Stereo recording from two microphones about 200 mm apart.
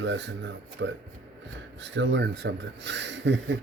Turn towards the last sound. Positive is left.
turn(degrees=-65)  # may be behind; listen again after turning